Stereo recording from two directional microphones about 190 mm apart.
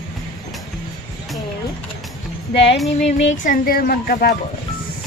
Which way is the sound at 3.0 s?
40° left (ahead or behind).